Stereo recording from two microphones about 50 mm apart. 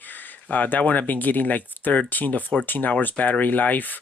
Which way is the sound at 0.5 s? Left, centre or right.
Left.